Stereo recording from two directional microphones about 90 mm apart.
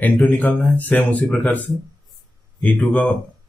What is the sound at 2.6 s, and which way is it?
Mantra, 15° left (ahead or behind).